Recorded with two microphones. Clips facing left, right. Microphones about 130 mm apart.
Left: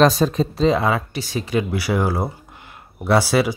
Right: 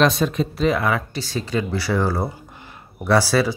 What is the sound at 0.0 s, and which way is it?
Speech, 40° left (ahead or behind).